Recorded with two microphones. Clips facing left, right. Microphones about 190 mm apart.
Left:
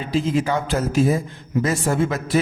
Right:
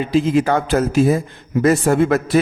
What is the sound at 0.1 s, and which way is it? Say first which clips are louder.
A man's voice: right 4 dB; 60° right (ahead or behind).